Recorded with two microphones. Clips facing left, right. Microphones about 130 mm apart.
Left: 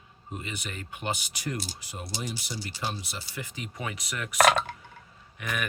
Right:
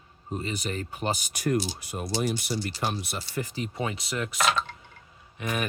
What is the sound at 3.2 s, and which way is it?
Speech, 40° right (ahead or behind).